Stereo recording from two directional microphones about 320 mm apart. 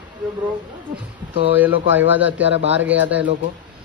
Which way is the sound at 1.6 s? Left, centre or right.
Centre.